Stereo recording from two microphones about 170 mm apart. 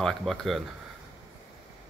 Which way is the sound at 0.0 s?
Centre (ahead or behind).